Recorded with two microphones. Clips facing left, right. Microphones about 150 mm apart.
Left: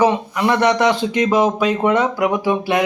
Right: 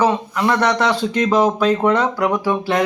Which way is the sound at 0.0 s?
15° left (ahead or behind).